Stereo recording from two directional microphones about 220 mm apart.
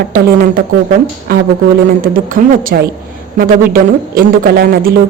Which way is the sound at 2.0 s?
40° right (ahead or behind).